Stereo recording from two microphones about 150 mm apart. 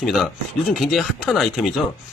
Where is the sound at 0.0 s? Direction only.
Centre (ahead or behind).